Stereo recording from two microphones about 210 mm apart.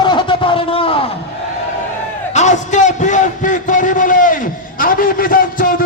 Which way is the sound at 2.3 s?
35° left (ahead or behind).